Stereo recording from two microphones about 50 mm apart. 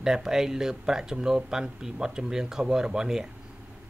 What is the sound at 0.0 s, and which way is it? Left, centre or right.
Speech, centre.